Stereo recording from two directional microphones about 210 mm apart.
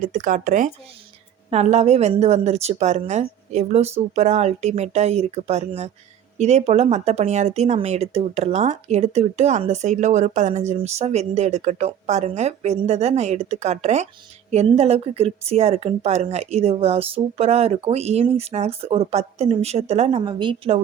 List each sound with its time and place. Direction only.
0.0 s speech: 40° right (ahead or behind)